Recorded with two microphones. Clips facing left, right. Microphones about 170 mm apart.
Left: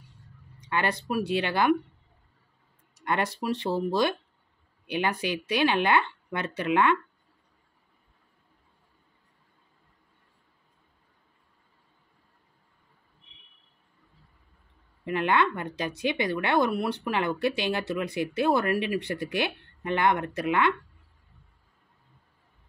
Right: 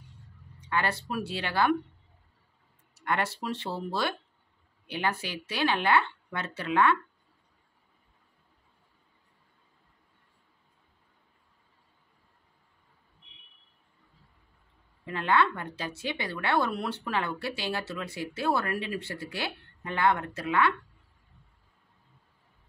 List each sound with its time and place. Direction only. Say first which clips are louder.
0.7 s a woman's voice: left 2 dB; 20° left (ahead or behind)
3.0 s a woman's voice: left 2 dB; 15° left (ahead or behind)
15.0 s a woman's voice: left 1 dB; 15° left (ahead or behind)